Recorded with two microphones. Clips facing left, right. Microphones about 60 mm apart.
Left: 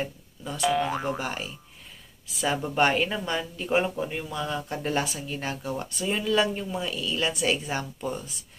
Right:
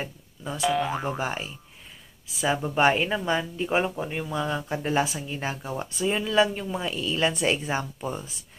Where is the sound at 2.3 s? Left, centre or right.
Centre; by 7.8 s right.